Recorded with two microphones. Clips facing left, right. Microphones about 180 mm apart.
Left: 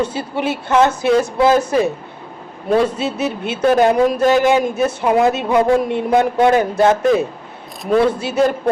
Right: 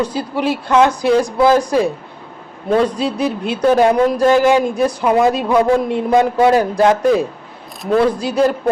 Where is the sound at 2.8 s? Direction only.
5° left (ahead or behind).